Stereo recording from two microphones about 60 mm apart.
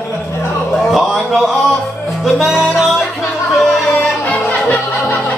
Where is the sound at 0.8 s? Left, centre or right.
Centre.